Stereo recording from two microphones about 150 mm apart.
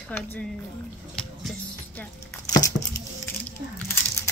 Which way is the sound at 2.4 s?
25° left (ahead or behind).